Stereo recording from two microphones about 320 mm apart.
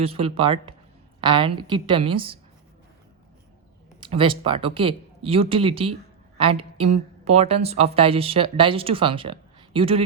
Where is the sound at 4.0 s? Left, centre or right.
Centre.